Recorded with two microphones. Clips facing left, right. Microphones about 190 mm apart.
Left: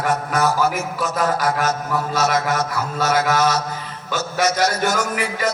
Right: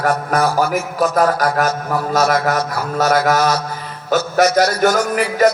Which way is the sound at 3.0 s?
45° right (ahead or behind).